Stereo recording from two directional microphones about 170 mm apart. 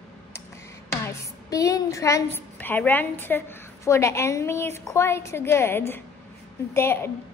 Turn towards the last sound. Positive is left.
turn(degrees=15)  # may be behind; listen again after turning